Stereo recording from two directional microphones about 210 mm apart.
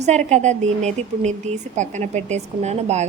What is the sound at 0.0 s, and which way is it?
A woman's voice, 35° right (ahead or behind).